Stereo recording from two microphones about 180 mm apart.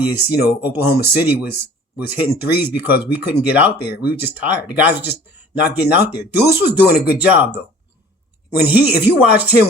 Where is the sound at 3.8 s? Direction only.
60° left (ahead or behind).